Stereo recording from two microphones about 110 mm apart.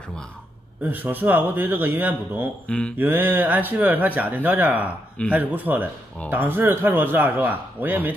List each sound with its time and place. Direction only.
0.8 s a man's voice: 20° right (ahead or behind)